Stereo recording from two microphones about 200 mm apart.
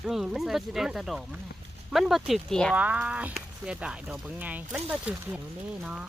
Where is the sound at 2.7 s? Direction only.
5° right (ahead or behind).